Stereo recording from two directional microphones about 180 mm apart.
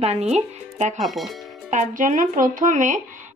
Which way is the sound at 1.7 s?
45° right (ahead or behind).